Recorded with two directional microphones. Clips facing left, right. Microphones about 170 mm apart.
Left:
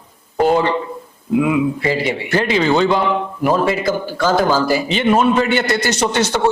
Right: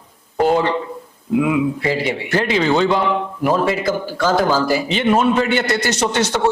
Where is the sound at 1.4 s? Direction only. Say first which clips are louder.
Left 1 dB; 15° left (ahead or behind).